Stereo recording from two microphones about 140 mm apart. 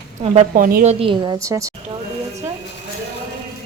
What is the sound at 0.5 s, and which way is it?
Speech, 85° right.